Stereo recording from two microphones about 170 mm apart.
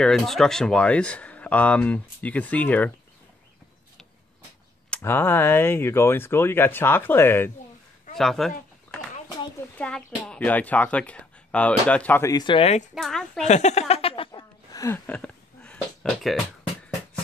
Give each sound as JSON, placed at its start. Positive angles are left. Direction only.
{"t": 0.0, "sound": "speech", "side_deg": 0}
{"t": 4.9, "sound": "speech", "side_deg": 15}
{"t": 8.2, "sound": "speech", "side_deg": 0}
{"t": 9.8, "sound": "speech", "side_deg": 5}
{"t": 12.9, "sound": "speech", "side_deg": 0}
{"t": 13.4, "sound": "a sound", "side_deg": 40}
{"t": 14.8, "sound": "a sound", "side_deg": 15}